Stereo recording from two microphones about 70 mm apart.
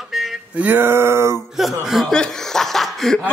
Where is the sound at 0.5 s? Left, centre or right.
Right.